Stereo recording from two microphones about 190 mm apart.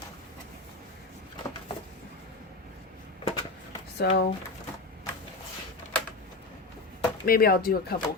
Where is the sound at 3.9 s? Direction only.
60° left (ahead or behind).